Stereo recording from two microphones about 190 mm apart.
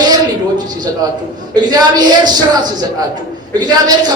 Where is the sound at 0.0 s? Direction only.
20° right (ahead or behind).